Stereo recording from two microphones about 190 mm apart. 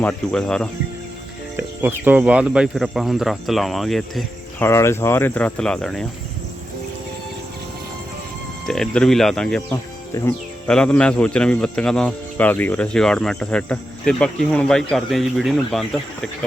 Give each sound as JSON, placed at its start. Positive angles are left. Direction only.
{"t": 0.0, "sound": "a man's voice", "side_deg": 5}
{"t": 1.5, "sound": "a man's voice", "side_deg": -10}
{"t": 4.6, "sound": "speech", "side_deg": 15}
{"t": 8.6, "sound": "a man's voice", "side_deg": 0}